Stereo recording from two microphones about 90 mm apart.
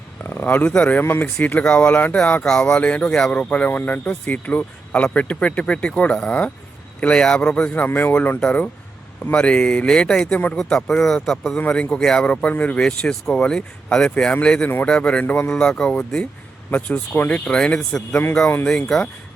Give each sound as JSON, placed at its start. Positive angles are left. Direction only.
{"t": 0.3, "sound": "speech", "side_deg": 20}